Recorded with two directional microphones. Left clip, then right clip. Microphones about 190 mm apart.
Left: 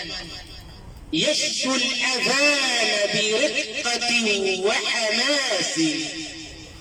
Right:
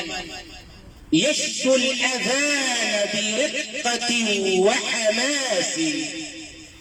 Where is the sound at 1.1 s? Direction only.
40° right (ahead or behind).